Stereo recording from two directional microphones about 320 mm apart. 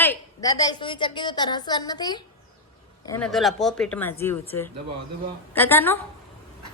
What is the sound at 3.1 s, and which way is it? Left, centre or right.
A woman's voice, centre.